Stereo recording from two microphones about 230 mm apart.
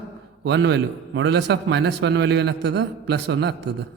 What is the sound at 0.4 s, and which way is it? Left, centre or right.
A man's voice, right.